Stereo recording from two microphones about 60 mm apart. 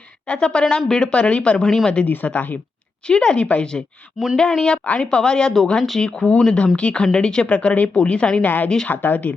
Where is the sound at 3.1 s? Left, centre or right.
Centre.